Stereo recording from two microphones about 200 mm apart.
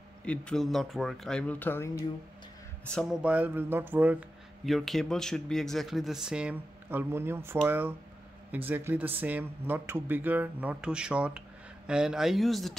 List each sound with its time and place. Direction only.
0.2 s speech: 5° left (ahead or behind)
2.9 s speech: centre (ahead or behind)